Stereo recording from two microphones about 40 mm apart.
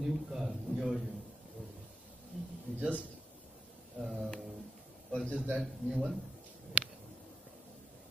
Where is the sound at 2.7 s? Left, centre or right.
Right.